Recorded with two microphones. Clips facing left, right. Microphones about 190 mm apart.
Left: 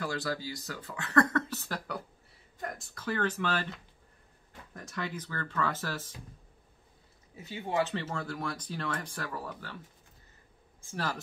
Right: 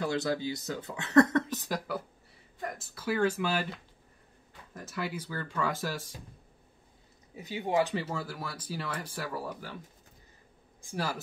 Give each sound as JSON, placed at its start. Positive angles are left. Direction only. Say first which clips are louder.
{"t": 0.0, "sound": "speech", "louder": "right 4 dB", "side_deg": -20}
{"t": 2.6, "sound": "speech", "louder": "right 2 dB", "side_deg": 0}
{"t": 4.7, "sound": "speech", "louder": "right 2 dB", "side_deg": -5}
{"t": 7.3, "sound": "speech", "louder": "right 3 dB", "side_deg": -15}
{"t": 10.8, "sound": "speech", "louder": "right 1 dB", "side_deg": -15}